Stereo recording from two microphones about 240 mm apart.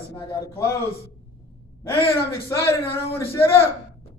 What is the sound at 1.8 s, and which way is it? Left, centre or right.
A man's voice, centre.